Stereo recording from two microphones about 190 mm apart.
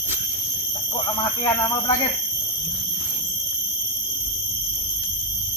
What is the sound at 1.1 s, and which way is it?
Speech, 25° left (ahead or behind).